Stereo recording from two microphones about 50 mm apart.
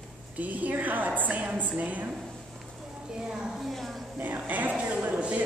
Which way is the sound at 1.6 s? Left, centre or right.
Right.